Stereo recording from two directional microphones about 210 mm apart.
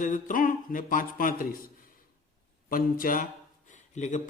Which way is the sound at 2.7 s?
40° left (ahead or behind).